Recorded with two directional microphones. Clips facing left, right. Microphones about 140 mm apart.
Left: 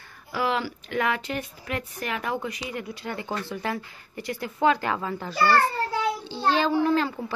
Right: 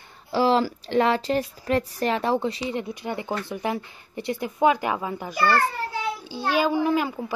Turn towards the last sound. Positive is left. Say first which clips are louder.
# even
turn(degrees=-10)  # may be behind; listen again after turning